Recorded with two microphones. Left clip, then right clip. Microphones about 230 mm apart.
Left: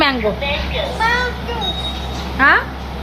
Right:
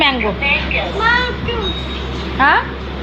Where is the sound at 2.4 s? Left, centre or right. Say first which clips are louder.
Even; centre.